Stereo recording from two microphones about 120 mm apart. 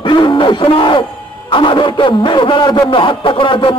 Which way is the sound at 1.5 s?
45° left (ahead or behind).